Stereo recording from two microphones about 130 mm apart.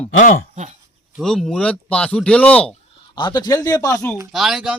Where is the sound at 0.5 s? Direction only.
60° right (ahead or behind).